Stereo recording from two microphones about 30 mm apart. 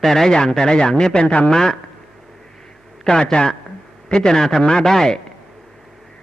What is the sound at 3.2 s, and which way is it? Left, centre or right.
A man's voice, left.